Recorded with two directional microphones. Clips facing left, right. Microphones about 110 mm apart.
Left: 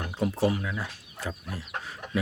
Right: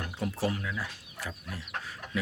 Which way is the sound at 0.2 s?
20° left (ahead or behind).